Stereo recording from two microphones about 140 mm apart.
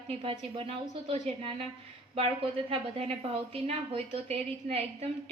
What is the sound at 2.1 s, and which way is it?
A woman's voice, 45° right (ahead or behind).